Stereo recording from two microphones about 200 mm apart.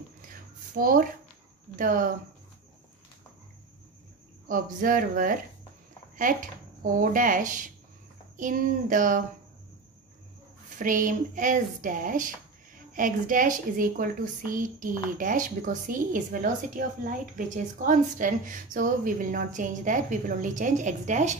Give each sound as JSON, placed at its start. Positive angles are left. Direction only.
{"t": 0.7, "sound": "speech", "side_deg": -45}
{"t": 4.5, "sound": "a woman's voice", "side_deg": -45}
{"t": 10.8, "sound": "a woman's voice", "side_deg": -40}